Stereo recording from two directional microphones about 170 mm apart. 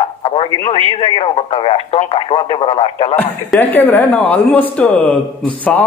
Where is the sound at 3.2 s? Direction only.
10° left (ahead or behind).